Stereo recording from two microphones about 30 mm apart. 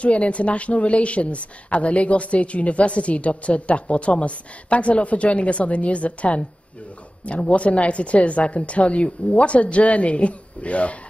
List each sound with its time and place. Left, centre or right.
0.0 s speech: left